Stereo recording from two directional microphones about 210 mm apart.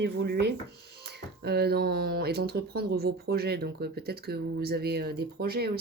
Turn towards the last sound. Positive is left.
turn(degrees=-50)  # may be behind; listen again after turning